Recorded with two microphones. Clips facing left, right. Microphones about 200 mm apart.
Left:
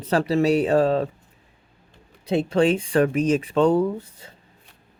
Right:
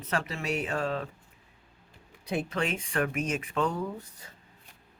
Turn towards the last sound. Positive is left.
turn(degrees=30)  # may be behind; listen again after turning